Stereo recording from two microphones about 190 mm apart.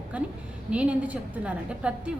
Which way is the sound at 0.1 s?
5° right (ahead or behind).